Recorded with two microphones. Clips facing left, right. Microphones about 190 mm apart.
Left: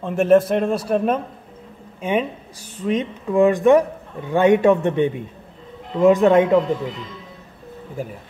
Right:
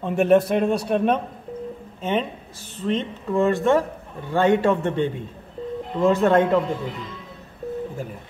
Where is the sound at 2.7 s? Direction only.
15° left (ahead or behind).